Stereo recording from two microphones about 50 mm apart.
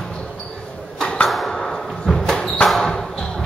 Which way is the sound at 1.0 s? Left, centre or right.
Centre.